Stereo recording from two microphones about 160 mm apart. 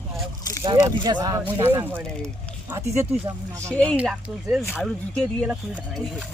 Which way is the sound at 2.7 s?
15° right (ahead or behind).